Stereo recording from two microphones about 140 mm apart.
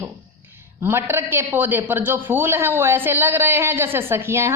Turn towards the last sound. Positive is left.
turn(degrees=-20)  # may be behind; listen again after turning